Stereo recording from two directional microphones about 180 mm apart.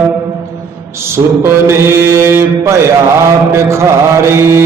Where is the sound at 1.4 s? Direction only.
15° right (ahead or behind).